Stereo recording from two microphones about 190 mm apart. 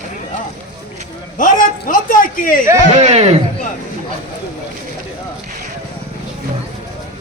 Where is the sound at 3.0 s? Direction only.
35° right (ahead or behind).